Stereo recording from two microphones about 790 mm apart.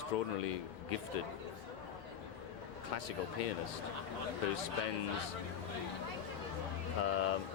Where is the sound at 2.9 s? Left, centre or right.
Left.